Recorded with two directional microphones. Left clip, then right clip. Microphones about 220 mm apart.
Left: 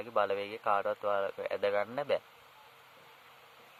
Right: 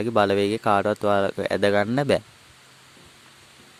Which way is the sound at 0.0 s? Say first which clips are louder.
Right 11 dB; 45° right (ahead or behind).